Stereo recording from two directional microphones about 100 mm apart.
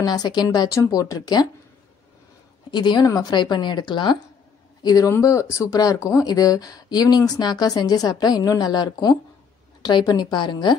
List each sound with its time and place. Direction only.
0.0 s speech: 45° left (ahead or behind)
2.7 s speech: 50° left (ahead or behind)
4.8 s speech: 35° left (ahead or behind)